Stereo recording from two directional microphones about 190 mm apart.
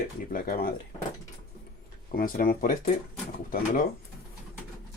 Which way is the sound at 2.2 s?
50° left (ahead or behind).